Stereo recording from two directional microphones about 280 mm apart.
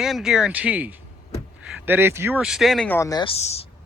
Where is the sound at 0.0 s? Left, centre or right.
Centre.